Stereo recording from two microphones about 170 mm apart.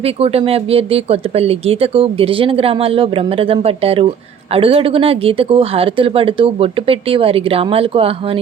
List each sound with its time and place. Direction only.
0.0 s speech: 35° right (ahead or behind)